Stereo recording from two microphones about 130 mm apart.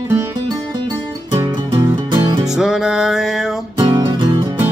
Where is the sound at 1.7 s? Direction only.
35° right (ahead or behind).